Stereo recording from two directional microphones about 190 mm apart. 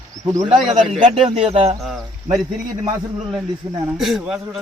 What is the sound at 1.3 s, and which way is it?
Speech, 30° right (ahead or behind).